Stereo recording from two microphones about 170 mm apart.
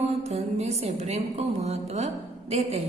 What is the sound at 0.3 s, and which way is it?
A woman's voice, 40° right (ahead or behind).